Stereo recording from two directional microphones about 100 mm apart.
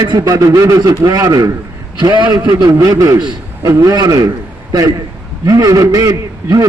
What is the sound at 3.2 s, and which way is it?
Speech, 50° right (ahead or behind).